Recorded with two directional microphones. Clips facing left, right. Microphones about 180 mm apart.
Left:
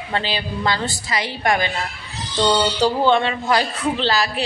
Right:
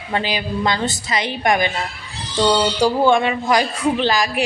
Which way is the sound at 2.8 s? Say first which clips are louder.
Right 2 dB; 10° right (ahead or behind).